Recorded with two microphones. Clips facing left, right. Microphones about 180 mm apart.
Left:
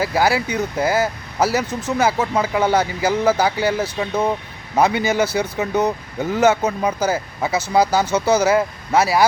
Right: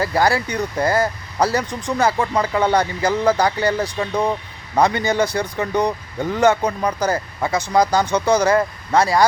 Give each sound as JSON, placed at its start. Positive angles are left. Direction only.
{"t": 0.0, "sound": "speech", "side_deg": 5}